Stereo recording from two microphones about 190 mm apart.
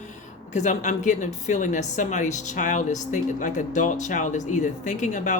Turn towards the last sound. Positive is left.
turn(degrees=40)  # may be behind; listen again after turning